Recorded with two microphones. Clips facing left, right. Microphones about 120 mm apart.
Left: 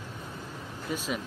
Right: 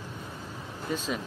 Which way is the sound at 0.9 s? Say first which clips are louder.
Right 2 dB; 10° left (ahead or behind).